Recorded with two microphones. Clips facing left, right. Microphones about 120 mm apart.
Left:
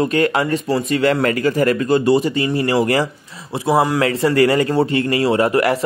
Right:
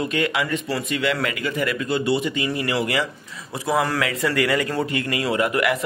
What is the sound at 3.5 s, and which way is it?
A man's voice, 25° left (ahead or behind).